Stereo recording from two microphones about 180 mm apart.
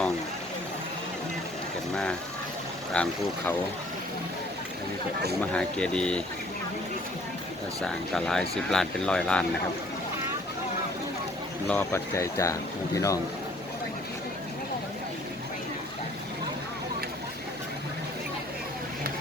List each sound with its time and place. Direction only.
2.9 s speech: 5° left (ahead or behind)
5.5 s speech: 5° left (ahead or behind)
7.8 s speech: centre (ahead or behind)
11.7 s speech: 15° left (ahead or behind)